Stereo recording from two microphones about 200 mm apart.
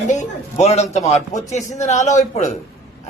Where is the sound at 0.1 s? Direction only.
35° left (ahead or behind).